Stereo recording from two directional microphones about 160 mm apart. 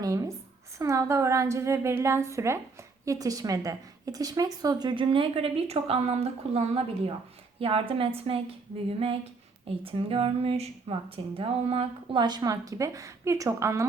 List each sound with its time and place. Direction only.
0.0 s a woman's voice: 20° right (ahead or behind); by 8.4 s 35° right (ahead or behind)
9.6 s a woman's voice: 35° right (ahead or behind); by 13.8 s 20° right (ahead or behind)